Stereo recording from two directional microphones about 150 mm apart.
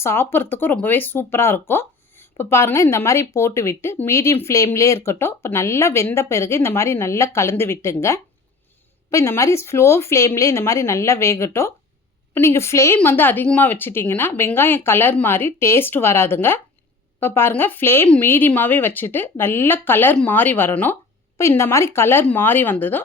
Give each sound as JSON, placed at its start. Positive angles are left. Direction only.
{"t": 0.0, "sound": "speech", "side_deg": 15}